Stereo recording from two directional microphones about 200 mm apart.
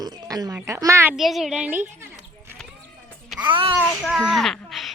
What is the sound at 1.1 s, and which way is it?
Speech, centre (ahead or behind).